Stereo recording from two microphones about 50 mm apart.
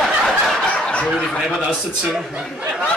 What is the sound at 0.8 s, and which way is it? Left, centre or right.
Speech, left.